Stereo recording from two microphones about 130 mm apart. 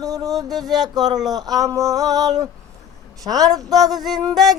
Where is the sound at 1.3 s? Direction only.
30° right (ahead or behind).